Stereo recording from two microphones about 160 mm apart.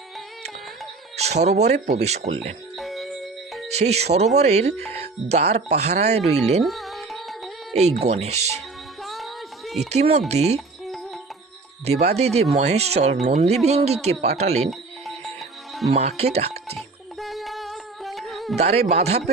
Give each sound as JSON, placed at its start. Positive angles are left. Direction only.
{"t": 1.1, "sound": "speech", "side_deg": -40}
{"t": 2.7, "sound": "music", "side_deg": 0}
{"t": 3.7, "sound": "speech", "side_deg": -45}
{"t": 6.6, "sound": "music", "side_deg": 0}
{"t": 7.8, "sound": "speech", "side_deg": -45}
{"t": 9.0, "sound": "a sound", "side_deg": 0}
{"t": 9.9, "sound": "speech", "side_deg": -40}
{"t": 11.9, "sound": "speech", "side_deg": -40}
{"t": 14.7, "sound": "music", "side_deg": 0}
{"t": 15.9, "sound": "speech", "side_deg": -45}
{"t": 16.7, "sound": "music", "side_deg": 0}
{"t": 18.5, "sound": "speech", "side_deg": -40}